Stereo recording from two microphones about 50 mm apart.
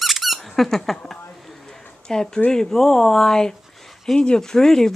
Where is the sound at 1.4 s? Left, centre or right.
Centre.